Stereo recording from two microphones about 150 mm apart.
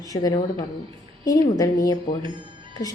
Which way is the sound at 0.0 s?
25° left (ahead or behind).